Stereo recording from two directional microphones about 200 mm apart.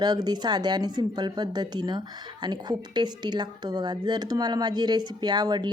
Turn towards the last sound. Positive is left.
turn(degrees=-20)  # may be behind; listen again after turning